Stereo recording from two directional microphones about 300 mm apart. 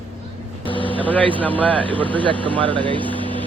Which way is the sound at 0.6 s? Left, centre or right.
Centre.